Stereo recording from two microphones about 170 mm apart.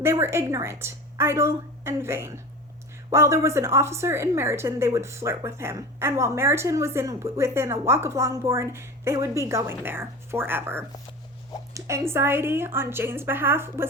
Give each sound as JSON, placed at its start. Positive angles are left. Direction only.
{"t": 0.0, "sound": "a woman's voice", "side_deg": -15}